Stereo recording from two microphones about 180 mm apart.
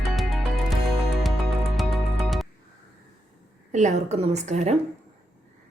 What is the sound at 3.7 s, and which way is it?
Speech, 40° right (ahead or behind).